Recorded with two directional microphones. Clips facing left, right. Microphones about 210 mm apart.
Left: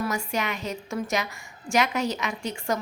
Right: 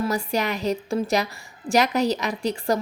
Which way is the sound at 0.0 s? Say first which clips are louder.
Right 4 dB; 35° right (ahead or behind).